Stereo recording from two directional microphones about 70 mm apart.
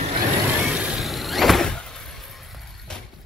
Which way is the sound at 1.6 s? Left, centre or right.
Centre.